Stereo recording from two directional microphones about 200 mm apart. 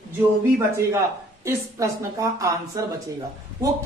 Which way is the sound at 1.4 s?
15° right (ahead or behind).